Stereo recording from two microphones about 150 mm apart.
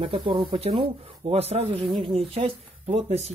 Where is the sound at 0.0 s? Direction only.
35° right (ahead or behind).